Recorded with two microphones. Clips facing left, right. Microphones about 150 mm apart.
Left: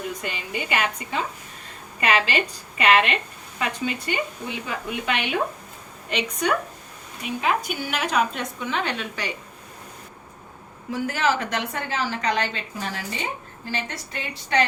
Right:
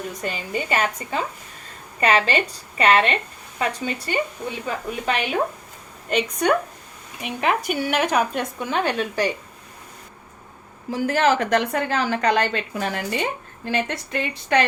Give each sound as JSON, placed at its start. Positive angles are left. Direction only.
{"t": 0.2, "sound": "a woman's voice", "side_deg": -40}
{"t": 7.2, "sound": "speech", "side_deg": -60}
{"t": 10.9, "sound": "a woman's voice", "side_deg": -40}